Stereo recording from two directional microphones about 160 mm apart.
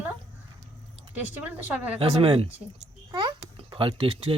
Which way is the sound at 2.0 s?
35° right (ahead or behind).